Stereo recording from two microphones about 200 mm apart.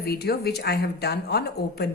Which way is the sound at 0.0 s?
50° left (ahead or behind).